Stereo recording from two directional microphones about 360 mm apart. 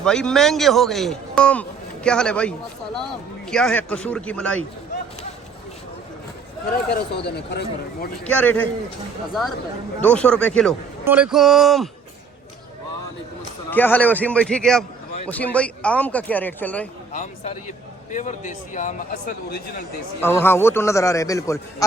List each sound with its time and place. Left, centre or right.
0.0 s a man's voice: centre
7.2 s a man's voice: left
8.2 s a man's voice: centre
13.7 s a man's voice: centre
17.1 s a man's voice: centre
20.2 s a man's voice: centre